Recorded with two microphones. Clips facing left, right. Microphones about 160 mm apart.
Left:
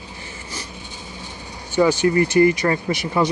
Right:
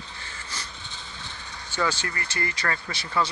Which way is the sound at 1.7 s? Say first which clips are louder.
Left 13 dB; 15° left (ahead or behind).